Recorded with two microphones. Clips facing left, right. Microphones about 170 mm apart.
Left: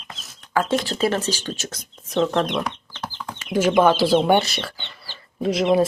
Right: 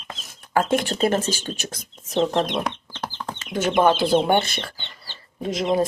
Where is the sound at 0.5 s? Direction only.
50° right (ahead or behind).